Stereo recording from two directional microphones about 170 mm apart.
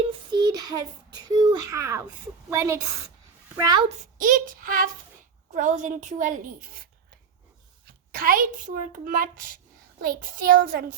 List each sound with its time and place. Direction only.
0.1 s child singing: 25° right (ahead or behind)
2.5 s a woman's voice: 15° right (ahead or behind)
3.8 s a woman's voice: 50° right (ahead or behind)
7.9 s a sound: 55° right (ahead or behind)
8.9 s speech: 55° right (ahead or behind)